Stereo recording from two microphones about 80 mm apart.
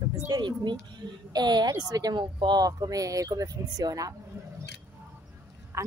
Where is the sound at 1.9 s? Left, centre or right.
Right.